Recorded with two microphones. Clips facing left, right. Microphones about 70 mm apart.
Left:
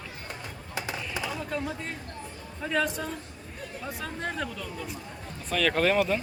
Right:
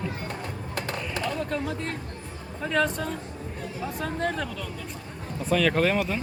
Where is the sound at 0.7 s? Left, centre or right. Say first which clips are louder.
Right 1 dB; centre.